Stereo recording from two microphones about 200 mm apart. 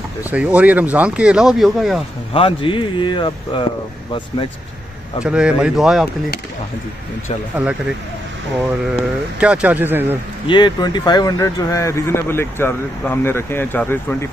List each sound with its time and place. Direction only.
0.2 s speech: 5° right (ahead or behind)
2.3 s speech: 25° left (ahead or behind)
5.2 s speech: 5° right (ahead or behind)
8.9 s speech: 5° right (ahead or behind)
10.4 s speech: 20° left (ahead or behind)